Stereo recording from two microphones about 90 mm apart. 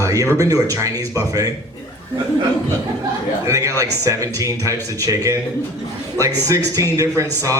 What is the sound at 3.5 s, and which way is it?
Speech, 35° right (ahead or behind).